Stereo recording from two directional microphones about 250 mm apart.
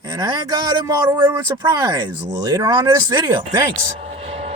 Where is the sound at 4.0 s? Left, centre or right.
Right.